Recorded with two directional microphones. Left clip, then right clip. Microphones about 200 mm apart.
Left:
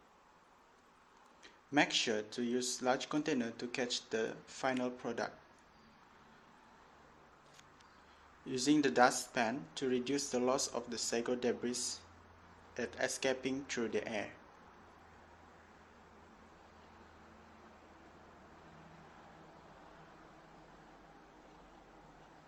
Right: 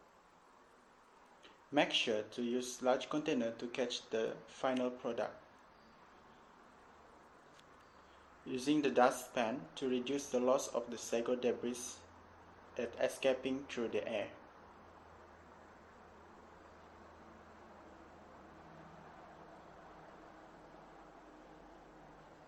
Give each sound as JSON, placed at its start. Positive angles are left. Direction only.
{"t": 1.7, "sound": "speech", "side_deg": 45}
{"t": 8.4, "sound": "speech", "side_deg": 45}
{"t": 12.7, "sound": "speech", "side_deg": 45}